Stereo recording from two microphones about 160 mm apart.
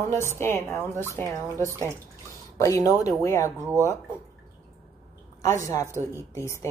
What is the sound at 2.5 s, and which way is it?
Speech, 20° left (ahead or behind).